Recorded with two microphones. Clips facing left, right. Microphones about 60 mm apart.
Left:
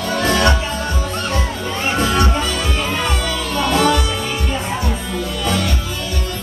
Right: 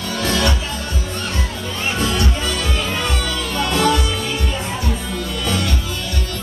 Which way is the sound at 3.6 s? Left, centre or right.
Left.